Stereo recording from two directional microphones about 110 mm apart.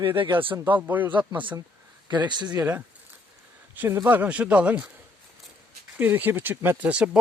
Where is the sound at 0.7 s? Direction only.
15° right (ahead or behind).